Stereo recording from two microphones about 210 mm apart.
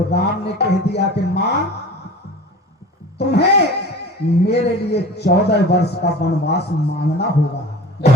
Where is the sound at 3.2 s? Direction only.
50° left (ahead or behind).